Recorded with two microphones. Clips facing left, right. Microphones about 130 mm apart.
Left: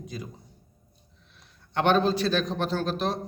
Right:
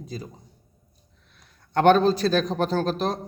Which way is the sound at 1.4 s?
45° right (ahead or behind).